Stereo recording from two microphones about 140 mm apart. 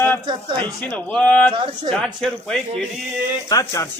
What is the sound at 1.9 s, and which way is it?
Speech, centre (ahead or behind).